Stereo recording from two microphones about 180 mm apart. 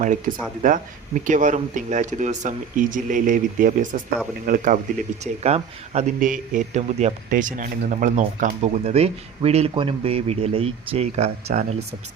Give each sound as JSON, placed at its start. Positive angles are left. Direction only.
{"t": 0.3, "sound": "speech", "side_deg": -50}